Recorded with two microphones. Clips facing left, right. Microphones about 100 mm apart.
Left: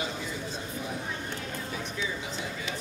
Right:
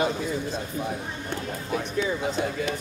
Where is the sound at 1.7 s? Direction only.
55° right (ahead or behind).